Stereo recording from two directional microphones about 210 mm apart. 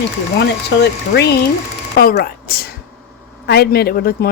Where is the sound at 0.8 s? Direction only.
50° left (ahead or behind).